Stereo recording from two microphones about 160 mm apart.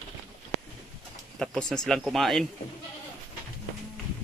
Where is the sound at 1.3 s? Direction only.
5° left (ahead or behind).